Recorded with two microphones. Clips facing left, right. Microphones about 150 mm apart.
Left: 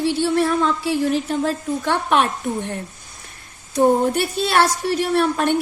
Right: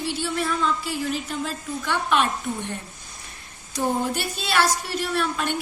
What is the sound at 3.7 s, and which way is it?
A woman's voice, 60° left (ahead or behind).